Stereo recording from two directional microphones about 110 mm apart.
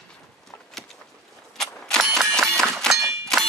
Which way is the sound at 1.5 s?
5° left (ahead or behind).